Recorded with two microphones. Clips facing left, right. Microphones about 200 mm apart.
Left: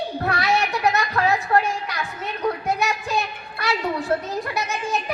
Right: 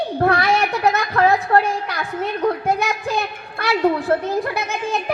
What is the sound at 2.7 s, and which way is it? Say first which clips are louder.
A child's voice: right 3 dB; 55° right (ahead or behind).